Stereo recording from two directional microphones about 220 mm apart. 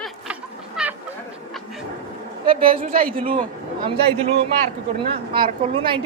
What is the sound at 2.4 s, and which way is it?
A woman's voice, 25° right (ahead or behind).